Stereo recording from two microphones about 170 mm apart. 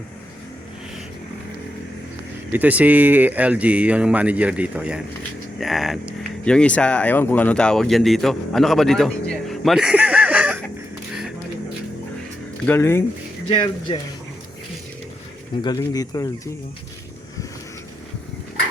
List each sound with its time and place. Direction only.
2.5 s speech: 10° right (ahead or behind)
12.6 s speech: 15° left (ahead or behind)
13.5 s speech: 30° left (ahead or behind)
15.6 s speech: 20° left (ahead or behind)